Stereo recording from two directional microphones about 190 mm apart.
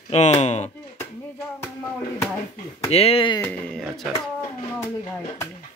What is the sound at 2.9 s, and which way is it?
Speech, 30° left (ahead or behind).